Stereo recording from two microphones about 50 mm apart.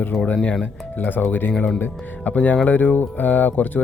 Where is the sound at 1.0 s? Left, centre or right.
Left.